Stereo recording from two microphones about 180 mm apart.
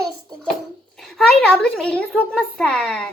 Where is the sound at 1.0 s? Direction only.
Centre (ahead or behind).